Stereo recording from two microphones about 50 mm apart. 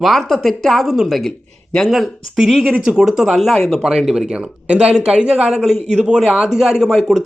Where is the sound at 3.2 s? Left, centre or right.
Centre.